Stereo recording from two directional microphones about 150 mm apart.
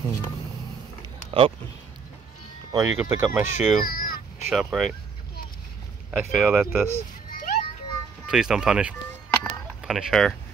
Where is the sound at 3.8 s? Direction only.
75° left (ahead or behind).